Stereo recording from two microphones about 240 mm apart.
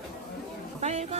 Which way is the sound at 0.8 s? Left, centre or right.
Right.